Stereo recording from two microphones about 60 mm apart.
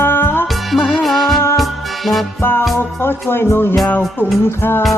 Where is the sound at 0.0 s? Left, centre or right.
Left.